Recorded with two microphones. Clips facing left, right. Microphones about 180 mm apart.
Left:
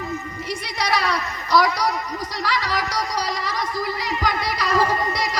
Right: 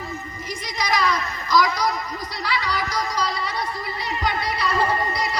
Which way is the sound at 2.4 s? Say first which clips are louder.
Left 1 dB; 90° left.